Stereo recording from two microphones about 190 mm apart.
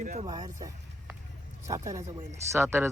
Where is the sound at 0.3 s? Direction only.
20° right (ahead or behind).